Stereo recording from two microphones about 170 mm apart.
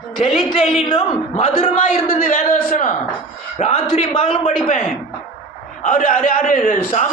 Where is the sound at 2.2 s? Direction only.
55° left (ahead or behind).